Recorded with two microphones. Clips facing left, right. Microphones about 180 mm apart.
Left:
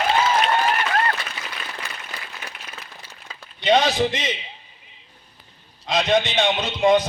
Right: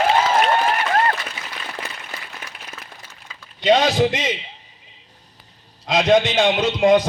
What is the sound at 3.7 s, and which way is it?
Speech, 50° right (ahead or behind).